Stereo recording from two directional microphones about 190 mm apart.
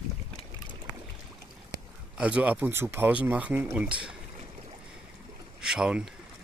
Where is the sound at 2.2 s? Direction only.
5° right (ahead or behind).